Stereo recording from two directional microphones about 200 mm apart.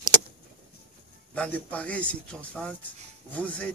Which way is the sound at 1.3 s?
5° left (ahead or behind).